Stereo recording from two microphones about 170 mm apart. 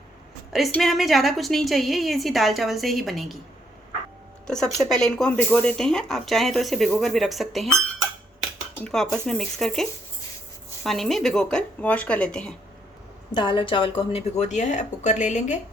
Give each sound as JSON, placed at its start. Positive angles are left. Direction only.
{"t": 0.7, "sound": "speech", "side_deg": 0}
{"t": 4.4, "sound": "speech", "side_deg": 5}
{"t": 8.8, "sound": "speech", "side_deg": 5}
{"t": 10.8, "sound": "speech", "side_deg": 0}
{"t": 13.3, "sound": "speech", "side_deg": 30}